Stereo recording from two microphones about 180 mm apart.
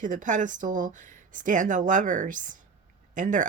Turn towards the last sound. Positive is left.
turn(degrees=-45)  # may be behind; listen again after turning